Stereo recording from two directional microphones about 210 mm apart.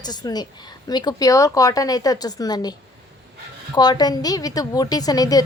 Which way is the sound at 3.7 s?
20° left (ahead or behind).